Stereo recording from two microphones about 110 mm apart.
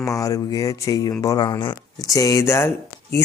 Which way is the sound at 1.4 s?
45° left (ahead or behind).